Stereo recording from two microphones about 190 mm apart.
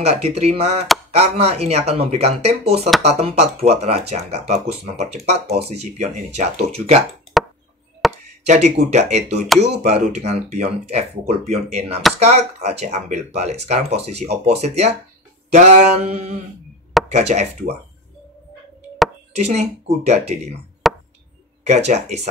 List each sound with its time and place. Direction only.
0.0 s speech: 35° right (ahead or behind)
7.3 s chop: centre (ahead or behind)
8.5 s speech: 35° right (ahead or behind)
19.3 s speech: 35° right (ahead or behind)
20.8 s chop: centre (ahead or behind)
21.6 s speech: 35° right (ahead or behind)